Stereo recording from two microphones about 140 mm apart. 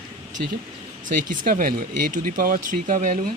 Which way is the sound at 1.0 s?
75° right (ahead or behind).